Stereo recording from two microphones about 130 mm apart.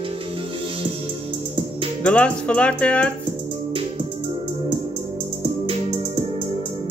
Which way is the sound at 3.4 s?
40° right (ahead or behind).